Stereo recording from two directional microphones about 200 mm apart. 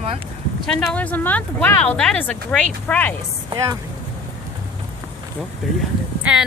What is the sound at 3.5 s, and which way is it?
Speech, 15° right (ahead or behind).